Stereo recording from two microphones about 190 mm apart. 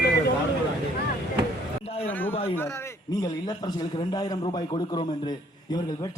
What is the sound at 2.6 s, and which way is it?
A man's voice, 15° left (ahead or behind).